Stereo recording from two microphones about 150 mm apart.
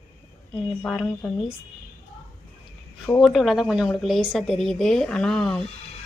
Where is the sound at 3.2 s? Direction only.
Centre (ahead or behind).